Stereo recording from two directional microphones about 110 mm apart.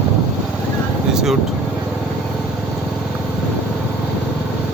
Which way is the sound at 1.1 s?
5° right (ahead or behind).